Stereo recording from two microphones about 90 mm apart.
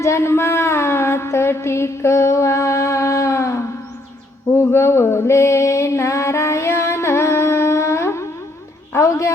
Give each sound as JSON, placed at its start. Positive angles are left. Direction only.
{"t": 0.0, "sound": "music", "side_deg": 30}
{"t": 4.5, "sound": "mantra", "side_deg": 25}
{"t": 8.9, "sound": "a sound", "side_deg": 30}